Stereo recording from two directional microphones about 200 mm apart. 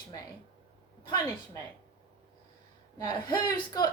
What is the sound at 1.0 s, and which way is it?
Speech, 20° left (ahead or behind).